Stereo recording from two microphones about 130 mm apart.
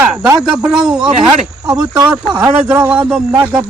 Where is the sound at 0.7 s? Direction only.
5° right (ahead or behind).